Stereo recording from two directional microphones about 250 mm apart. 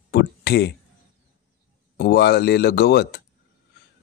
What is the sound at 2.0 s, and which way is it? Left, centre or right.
Speech, left.